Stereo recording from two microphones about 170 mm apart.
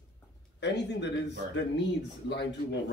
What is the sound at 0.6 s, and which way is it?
Speech, 90° left.